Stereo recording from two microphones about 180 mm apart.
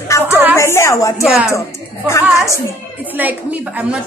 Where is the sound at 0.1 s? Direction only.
15° left (ahead or behind).